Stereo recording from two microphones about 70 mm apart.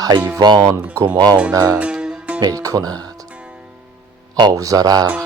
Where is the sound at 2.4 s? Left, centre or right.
Right.